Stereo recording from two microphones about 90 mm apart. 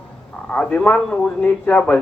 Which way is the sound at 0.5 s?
10° left (ahead or behind).